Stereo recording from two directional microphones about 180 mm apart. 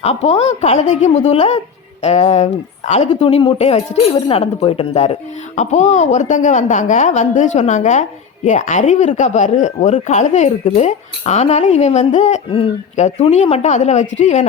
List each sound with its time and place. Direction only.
0.0 s speech: 35° left (ahead or behind)